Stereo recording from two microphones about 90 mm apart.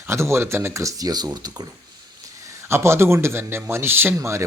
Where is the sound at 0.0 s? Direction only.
30° right (ahead or behind); by 1.6 s 50° right (ahead or behind).